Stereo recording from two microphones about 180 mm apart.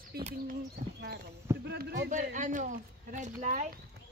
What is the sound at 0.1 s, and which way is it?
Speech, 60° right (ahead or behind).